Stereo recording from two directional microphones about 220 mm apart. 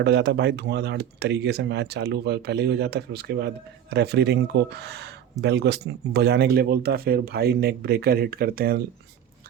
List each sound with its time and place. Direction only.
0.0 s speech: 50° right (ahead or behind)